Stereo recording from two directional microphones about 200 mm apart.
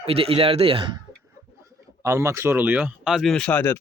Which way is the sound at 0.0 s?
30° right (ahead or behind).